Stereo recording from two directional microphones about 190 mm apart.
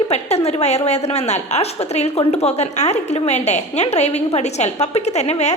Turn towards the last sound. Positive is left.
turn(degrees=35)  # may be behind; listen again after turning